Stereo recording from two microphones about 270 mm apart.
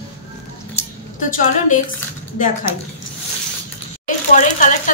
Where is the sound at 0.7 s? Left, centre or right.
Left.